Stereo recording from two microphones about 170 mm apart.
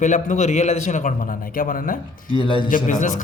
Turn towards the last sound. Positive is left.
turn(degrees=50)  # may be behind; listen again after turning